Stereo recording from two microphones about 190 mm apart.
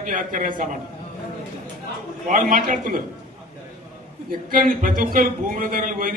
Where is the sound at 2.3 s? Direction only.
45° right (ahead or behind).